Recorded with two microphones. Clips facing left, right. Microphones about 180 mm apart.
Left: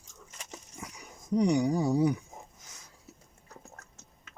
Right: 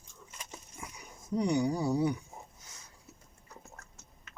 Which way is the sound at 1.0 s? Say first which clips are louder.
Left 5 dB; 40° left (ahead or behind).